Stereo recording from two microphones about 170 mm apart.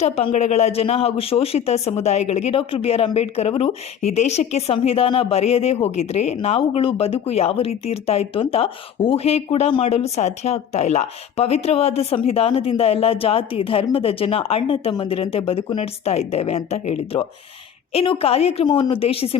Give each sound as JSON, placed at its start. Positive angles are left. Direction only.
{"t": 0.0, "sound": "speech", "side_deg": 40}